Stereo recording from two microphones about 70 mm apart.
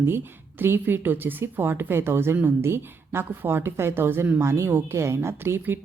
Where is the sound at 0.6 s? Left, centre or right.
Right.